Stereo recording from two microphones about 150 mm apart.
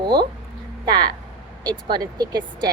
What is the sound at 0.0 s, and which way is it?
A woman's voice, 30° right (ahead or behind).